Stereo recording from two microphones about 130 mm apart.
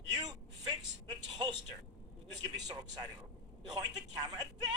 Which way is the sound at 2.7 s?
30° right (ahead or behind).